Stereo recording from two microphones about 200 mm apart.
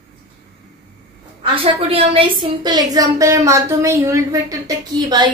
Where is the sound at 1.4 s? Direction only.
25° right (ahead or behind).